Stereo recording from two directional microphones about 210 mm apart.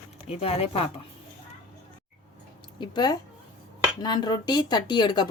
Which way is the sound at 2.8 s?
20° left (ahead or behind).